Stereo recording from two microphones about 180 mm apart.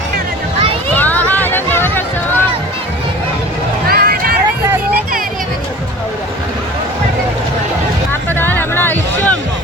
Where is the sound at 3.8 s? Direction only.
55° right (ahead or behind).